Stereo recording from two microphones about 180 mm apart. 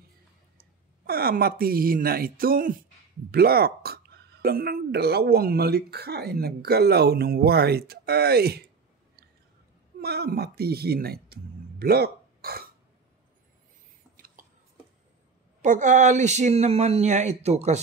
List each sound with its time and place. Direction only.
0.6 s speech: 55° right (ahead or behind)
9.9 s speech: 60° right (ahead or behind)
14.1 s a sound: 50° right (ahead or behind)
15.6 s speech: 45° right (ahead or behind)